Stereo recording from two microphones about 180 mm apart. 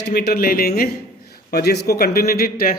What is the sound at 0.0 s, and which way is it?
A man's voice, 60° left (ahead or behind).